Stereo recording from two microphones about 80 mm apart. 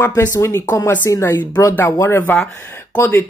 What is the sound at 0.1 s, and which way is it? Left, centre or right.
Speech, left.